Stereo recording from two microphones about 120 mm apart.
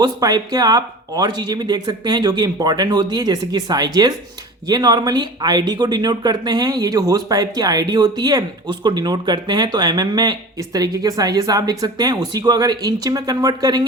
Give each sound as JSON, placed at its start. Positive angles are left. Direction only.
{"t": 0.0, "sound": "speech", "side_deg": -35}